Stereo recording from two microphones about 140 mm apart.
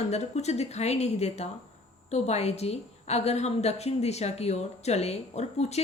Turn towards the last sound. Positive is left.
turn(degrees=50)  # may be behind; listen again after turning